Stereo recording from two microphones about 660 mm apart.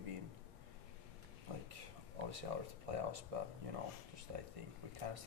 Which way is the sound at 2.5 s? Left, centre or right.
Right.